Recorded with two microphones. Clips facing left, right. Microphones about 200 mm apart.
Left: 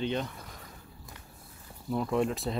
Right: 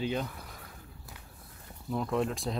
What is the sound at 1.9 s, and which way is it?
Speech, centre (ahead or behind).